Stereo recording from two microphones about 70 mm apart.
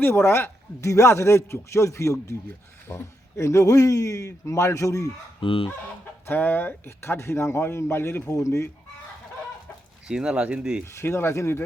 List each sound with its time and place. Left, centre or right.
0.0 s a man's voice: left
6.2 s speech: left
10.1 s speech: centre
10.8 s speech: left